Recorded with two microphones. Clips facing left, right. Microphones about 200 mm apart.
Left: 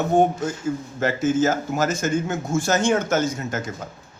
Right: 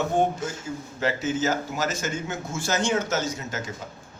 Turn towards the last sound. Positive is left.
turn(degrees=55)  # may be behind; listen again after turning